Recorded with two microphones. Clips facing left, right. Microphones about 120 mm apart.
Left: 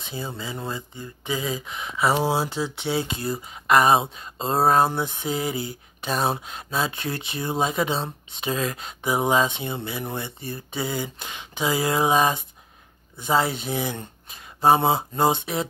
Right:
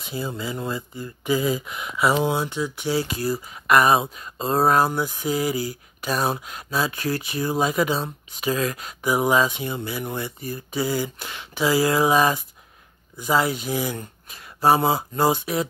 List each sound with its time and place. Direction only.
0.1 s speech: 30° left (ahead or behind)